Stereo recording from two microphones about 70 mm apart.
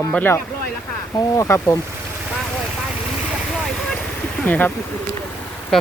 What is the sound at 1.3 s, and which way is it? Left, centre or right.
Speech, left.